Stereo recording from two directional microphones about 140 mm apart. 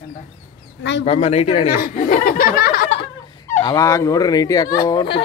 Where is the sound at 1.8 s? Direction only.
75° left (ahead or behind); by 2.9 s 90° left.